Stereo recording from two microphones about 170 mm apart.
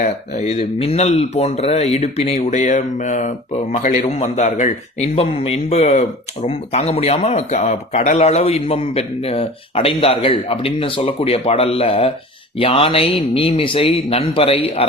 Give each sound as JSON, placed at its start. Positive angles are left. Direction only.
{"t": 0.0, "sound": "speech", "side_deg": 40}